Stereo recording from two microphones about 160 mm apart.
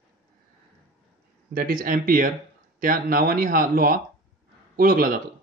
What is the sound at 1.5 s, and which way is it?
Speech, 65° right (ahead or behind).